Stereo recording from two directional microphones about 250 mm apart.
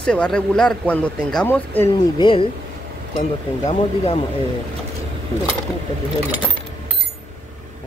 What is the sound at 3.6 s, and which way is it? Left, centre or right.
Speech, left.